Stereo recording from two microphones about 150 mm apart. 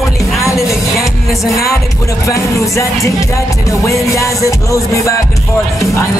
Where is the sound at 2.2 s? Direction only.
20° left (ahead or behind).